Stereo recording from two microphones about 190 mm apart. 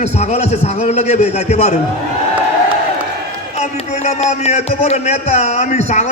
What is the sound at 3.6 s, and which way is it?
A man's voice, 35° left (ahead or behind).